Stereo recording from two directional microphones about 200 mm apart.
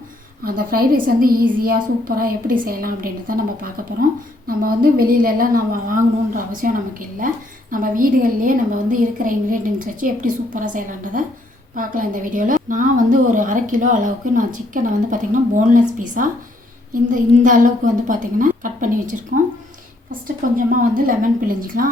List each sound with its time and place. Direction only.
0.4 s a woman's voice: 45° right (ahead or behind)
7.7 s a woman's voice: 45° right (ahead or behind)